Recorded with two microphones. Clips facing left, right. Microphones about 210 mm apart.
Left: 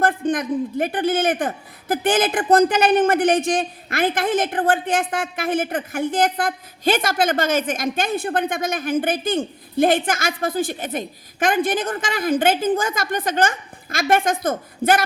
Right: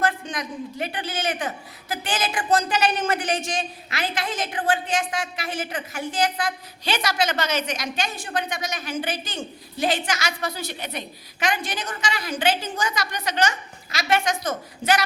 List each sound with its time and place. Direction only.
0.0 s a man's voice: 50° left (ahead or behind)